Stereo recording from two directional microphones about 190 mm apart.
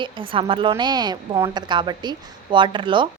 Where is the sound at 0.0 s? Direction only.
25° right (ahead or behind).